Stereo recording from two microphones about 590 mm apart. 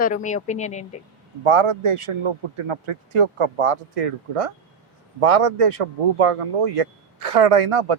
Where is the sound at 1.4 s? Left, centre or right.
Right.